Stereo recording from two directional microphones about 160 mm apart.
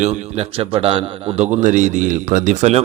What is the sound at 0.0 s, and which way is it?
A man's voice, 45° right (ahead or behind).